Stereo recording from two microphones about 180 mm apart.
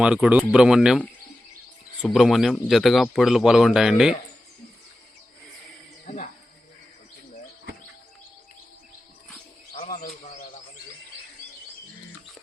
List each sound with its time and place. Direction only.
0.0 s speech: 5° right (ahead or behind)
9.7 s bird: 45° left (ahead or behind)